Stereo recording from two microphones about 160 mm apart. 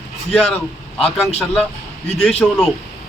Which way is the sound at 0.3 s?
5° left (ahead or behind).